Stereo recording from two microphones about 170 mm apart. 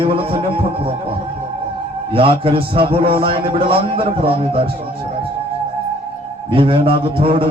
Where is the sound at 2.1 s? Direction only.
30° right (ahead or behind).